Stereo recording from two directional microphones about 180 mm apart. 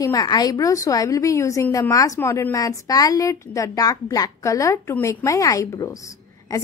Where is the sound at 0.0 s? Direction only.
20° left (ahead or behind).